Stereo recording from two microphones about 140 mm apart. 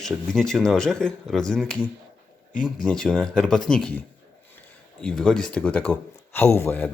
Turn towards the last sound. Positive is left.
turn(degrees=15)  # may be behind; listen again after turning